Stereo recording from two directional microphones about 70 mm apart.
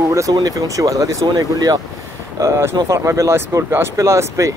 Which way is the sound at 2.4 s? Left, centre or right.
Right.